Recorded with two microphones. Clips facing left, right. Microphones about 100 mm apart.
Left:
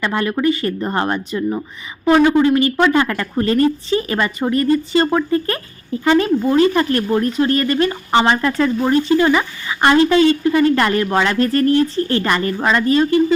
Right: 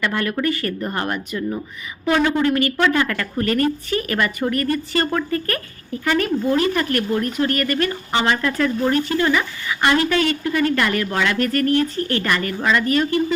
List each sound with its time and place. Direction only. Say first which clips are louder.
0.0 s speech: left 4 dB; 25° left (ahead or behind)